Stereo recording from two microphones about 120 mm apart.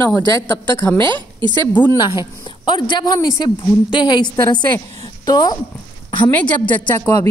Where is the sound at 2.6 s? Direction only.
40° left (ahead or behind).